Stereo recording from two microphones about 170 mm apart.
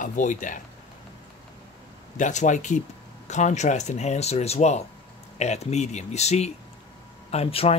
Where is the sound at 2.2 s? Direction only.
45° left (ahead or behind).